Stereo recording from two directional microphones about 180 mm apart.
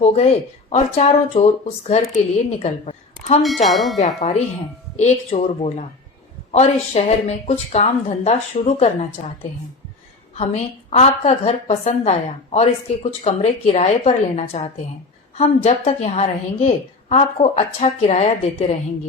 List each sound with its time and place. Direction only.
0.7 s a woman's voice: 35° left (ahead or behind)
3.4 s speech: centre (ahead or behind)
3.9 s a woman's voice: 40° left (ahead or behind)
10.3 s a woman's voice: 35° left (ahead or behind)